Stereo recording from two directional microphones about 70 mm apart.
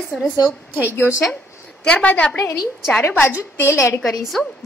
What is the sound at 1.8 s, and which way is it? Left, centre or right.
A woman's voice, left.